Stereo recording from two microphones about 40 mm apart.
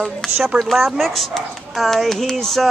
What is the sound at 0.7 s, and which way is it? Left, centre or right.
Speech, centre.